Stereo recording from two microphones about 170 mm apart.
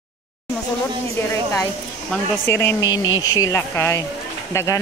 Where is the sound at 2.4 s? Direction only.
15° left (ahead or behind).